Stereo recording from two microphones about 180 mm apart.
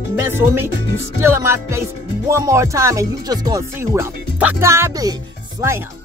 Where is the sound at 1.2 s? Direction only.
15° right (ahead or behind).